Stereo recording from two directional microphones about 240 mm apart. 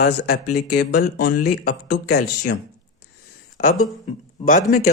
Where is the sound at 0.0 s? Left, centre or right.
Left.